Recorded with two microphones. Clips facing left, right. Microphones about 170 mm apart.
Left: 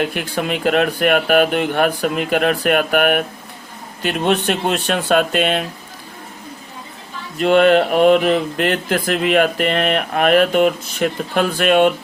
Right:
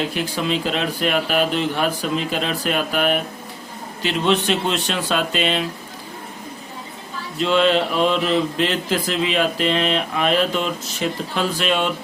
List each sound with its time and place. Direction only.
0.0 s speech: 55° left (ahead or behind)
7.3 s speech: 55° left (ahead or behind)